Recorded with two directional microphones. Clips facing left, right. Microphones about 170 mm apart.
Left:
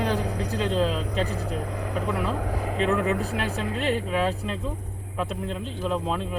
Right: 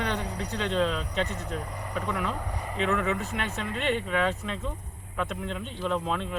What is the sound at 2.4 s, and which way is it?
Speech, 90° left.